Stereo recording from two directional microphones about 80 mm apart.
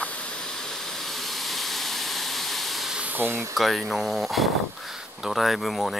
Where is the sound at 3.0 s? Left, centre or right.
Right.